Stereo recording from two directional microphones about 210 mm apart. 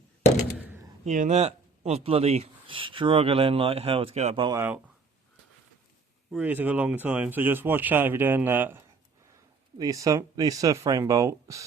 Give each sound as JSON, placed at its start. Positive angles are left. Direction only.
{"t": 0.6, "sound": "door", "side_deg": -10}
{"t": 1.0, "sound": "speech", "side_deg": -35}
{"t": 6.3, "sound": "speech", "side_deg": -10}